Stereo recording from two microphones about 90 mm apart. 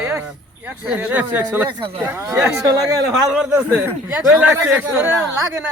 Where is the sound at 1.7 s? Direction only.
70° right (ahead or behind).